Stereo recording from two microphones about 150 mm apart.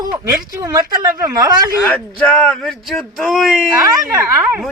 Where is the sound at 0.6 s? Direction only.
20° right (ahead or behind).